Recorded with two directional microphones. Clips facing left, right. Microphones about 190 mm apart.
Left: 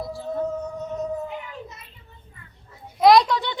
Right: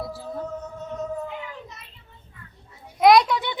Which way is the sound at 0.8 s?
15° left (ahead or behind).